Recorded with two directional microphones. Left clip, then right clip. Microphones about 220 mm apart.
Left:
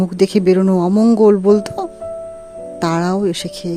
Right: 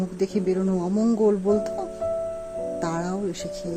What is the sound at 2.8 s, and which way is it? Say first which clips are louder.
Music: left 15 dB; 45° left (ahead or behind).